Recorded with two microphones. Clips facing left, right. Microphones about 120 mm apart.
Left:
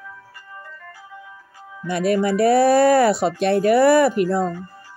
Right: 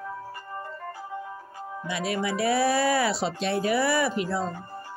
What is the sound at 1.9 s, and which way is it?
Speech, 50° left (ahead or behind).